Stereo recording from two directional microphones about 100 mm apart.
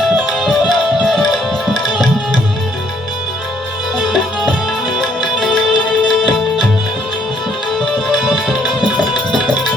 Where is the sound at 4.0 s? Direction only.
5° left (ahead or behind).